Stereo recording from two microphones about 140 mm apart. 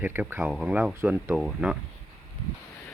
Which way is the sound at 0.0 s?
15° right (ahead or behind).